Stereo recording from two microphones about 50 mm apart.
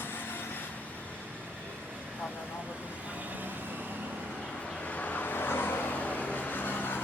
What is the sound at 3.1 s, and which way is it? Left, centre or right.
Vehicle, right.